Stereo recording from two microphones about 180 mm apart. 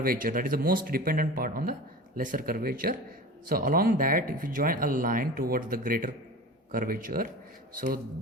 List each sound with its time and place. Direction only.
0.0 s speech: 55° right (ahead or behind)